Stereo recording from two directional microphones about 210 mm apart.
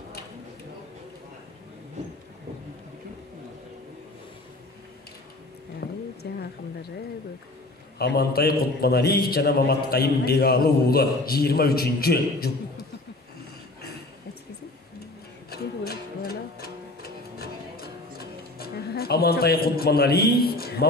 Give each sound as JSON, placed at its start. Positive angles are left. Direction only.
{"t": 5.8, "sound": "a sound", "side_deg": 50}
{"t": 8.0, "sound": "a man's voice", "side_deg": 50}
{"t": 15.5, "sound": "music", "side_deg": 50}